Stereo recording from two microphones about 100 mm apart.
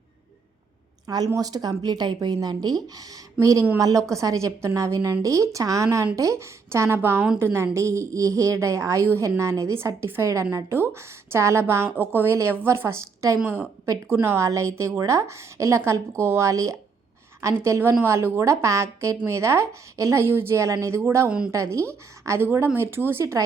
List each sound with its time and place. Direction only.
1.0 s a woman's voice: 40° right (ahead or behind)
13.4 s a woman's voice: 20° right (ahead or behind)
13.8 s a woman's voice: 30° right (ahead or behind)
21.2 s a woman's voice: 10° right (ahead or behind)
21.5 s a woman's voice: 30° right (ahead or behind)